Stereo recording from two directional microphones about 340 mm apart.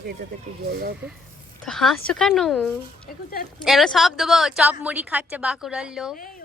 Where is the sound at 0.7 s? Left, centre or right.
Right.